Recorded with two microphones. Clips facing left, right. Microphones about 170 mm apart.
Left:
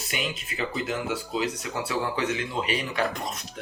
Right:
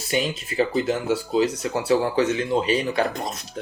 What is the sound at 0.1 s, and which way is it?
Speech, 35° right (ahead or behind).